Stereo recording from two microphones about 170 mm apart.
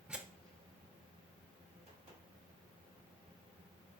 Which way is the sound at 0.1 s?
5° right (ahead or behind).